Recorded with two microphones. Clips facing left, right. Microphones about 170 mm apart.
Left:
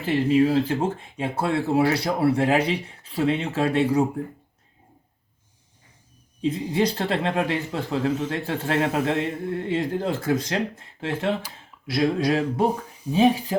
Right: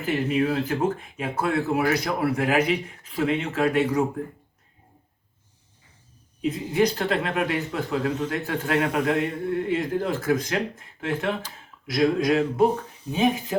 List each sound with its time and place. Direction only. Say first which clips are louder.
0.0 s speech: left 4 dB; 30° left (ahead or behind)
6.4 s speech: even; 30° left (ahead or behind)
11.9 s a sound: right 1 dB; 30° left (ahead or behind)